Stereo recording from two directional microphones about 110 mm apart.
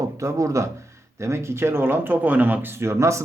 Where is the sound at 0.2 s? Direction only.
30° right (ahead or behind).